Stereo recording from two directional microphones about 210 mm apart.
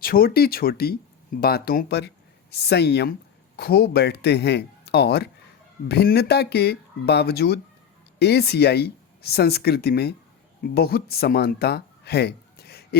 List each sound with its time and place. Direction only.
0.0 s speech: 45° left (ahead or behind)